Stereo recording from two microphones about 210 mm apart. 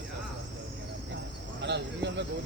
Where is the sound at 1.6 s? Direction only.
55° right (ahead or behind).